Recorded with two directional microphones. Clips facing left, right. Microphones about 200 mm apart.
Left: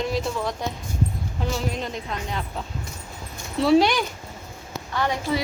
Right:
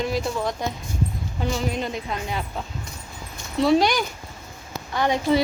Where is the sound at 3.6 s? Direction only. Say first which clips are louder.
Left 1 dB; centre (ahead or behind).